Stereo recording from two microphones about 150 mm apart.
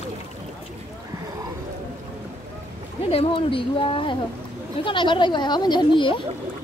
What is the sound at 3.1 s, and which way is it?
Speech, 35° left (ahead or behind).